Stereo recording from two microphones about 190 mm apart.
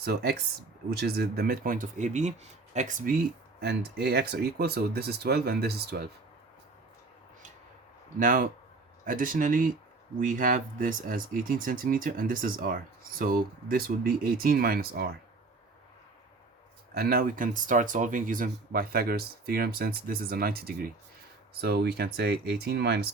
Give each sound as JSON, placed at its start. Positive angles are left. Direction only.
{"t": 0.0, "sound": "speech", "side_deg": -60}
{"t": 3.6, "sound": "speech", "side_deg": -60}
{"t": 8.2, "sound": "speech", "side_deg": -45}
{"t": 16.9, "sound": "speech", "side_deg": -55}